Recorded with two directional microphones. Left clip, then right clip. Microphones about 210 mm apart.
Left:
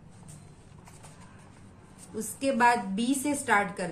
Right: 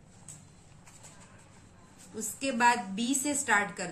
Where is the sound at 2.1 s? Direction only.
5° left (ahead or behind).